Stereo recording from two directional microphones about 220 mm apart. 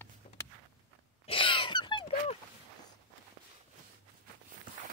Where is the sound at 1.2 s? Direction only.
25° left (ahead or behind).